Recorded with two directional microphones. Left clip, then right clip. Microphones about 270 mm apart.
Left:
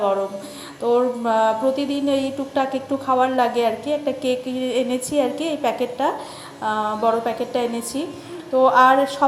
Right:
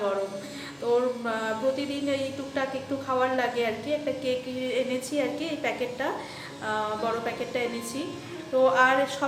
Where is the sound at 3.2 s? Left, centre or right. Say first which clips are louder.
Left 7 dB; centre.